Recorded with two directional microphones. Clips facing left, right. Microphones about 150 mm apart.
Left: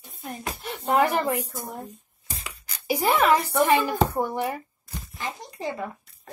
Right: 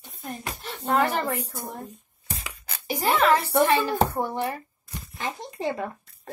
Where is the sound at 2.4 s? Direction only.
10° left (ahead or behind).